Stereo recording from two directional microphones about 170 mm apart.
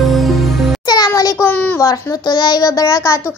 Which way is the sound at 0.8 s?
25° left (ahead or behind).